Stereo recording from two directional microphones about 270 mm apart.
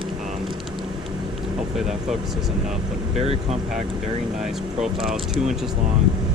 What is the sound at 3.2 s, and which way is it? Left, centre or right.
Speech, right.